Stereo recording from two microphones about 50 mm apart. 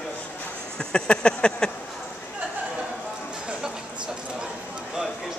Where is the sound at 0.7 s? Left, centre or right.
Centre.